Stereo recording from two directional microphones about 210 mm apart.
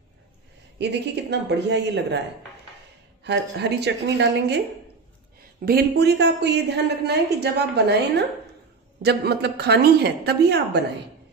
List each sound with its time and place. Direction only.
0.7 s a woman's voice: 55° right (ahead or behind)
3.3 s a woman's voice: 55° right (ahead or behind)
5.7 s a woman's voice: 50° right (ahead or behind)